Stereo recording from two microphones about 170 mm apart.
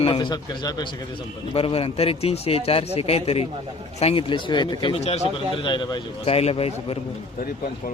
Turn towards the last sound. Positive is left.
turn(degrees=35)  # may be behind; listen again after turning